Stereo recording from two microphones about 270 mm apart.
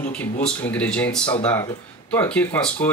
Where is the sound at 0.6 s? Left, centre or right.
Centre.